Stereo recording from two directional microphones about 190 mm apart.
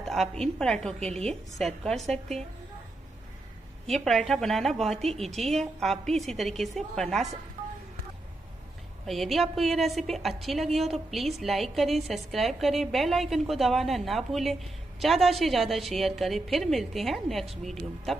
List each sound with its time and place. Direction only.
0.0 s a woman's voice: centre (ahead or behind)
3.8 s a woman's voice: centre (ahead or behind)
9.0 s a woman's voice: centre (ahead or behind)